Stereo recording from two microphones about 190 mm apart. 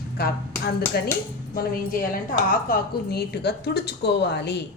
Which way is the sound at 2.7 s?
55° left (ahead or behind).